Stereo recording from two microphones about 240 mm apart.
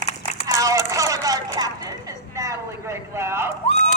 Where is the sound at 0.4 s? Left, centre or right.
Centre.